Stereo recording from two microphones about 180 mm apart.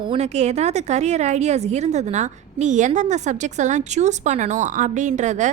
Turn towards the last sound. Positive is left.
turn(degrees=-40)  # may be behind; listen again after turning